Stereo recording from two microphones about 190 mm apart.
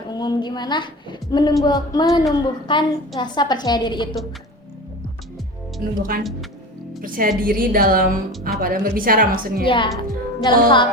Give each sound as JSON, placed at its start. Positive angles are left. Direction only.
{"t": 0.1, "sound": "a woman's voice", "side_deg": 20}
{"t": 6.0, "sound": "a woman's voice", "side_deg": -50}
{"t": 9.6, "sound": "a woman's voice", "side_deg": 25}
{"t": 10.0, "sound": "music", "side_deg": 25}